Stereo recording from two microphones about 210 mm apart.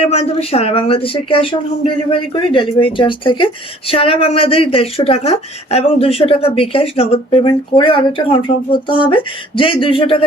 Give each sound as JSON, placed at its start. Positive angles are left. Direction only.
{"t": 0.0, "sound": "speech", "side_deg": 30}